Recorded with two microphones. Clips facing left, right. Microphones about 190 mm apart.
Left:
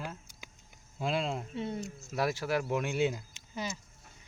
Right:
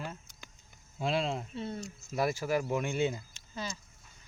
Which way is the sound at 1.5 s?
15° left (ahead or behind).